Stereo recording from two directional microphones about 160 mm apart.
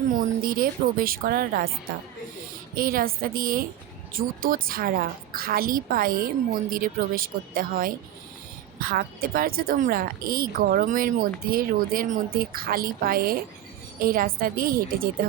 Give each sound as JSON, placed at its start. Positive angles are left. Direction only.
{"t": 0.2, "sound": "a woman's voice", "side_deg": -60}
{"t": 2.7, "sound": "a woman's voice", "side_deg": -65}